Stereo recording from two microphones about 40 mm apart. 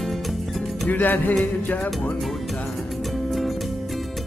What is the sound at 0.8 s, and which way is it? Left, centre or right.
Music, left.